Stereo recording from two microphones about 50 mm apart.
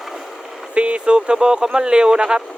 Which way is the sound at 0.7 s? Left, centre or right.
Right.